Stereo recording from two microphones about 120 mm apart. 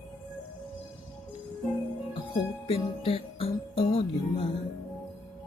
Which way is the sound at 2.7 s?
50° left (ahead or behind).